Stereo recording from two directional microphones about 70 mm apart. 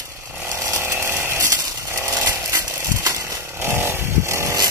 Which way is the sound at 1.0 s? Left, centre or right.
Right.